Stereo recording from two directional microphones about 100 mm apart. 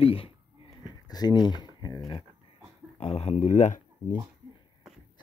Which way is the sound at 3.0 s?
90° left.